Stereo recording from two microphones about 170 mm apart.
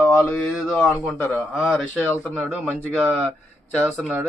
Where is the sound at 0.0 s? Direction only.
10° left (ahead or behind).